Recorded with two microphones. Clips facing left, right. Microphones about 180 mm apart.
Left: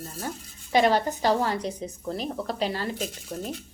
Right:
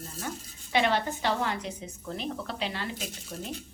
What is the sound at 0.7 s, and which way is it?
A woman's voice, 40° left (ahead or behind).